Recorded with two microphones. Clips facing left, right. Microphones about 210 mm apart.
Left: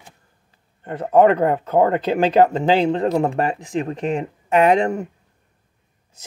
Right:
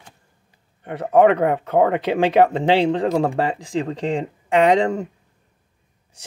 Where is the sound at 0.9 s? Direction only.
70° right (ahead or behind).